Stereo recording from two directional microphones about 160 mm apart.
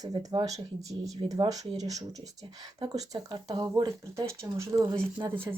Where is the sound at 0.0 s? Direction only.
25° right (ahead or behind).